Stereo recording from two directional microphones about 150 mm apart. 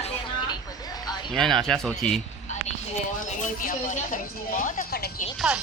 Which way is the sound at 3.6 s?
60° left (ahead or behind).